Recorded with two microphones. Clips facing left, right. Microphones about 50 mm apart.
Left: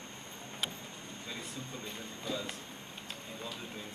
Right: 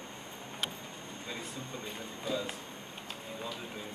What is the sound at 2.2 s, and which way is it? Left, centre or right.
Speech, centre.